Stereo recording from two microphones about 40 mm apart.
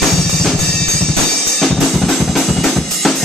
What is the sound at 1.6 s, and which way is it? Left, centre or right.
Drum kit, centre.